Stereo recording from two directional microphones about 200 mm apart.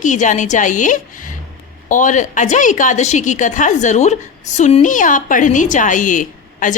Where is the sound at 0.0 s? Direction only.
40° left (ahead or behind).